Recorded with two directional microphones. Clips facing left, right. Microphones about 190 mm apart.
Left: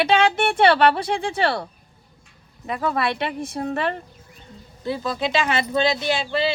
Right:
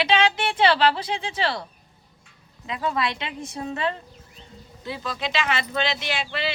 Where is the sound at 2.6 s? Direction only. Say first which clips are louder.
Left 3 dB; 55° left (ahead or behind).